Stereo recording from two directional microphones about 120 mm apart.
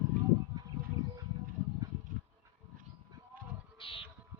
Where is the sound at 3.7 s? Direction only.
45° left (ahead or behind).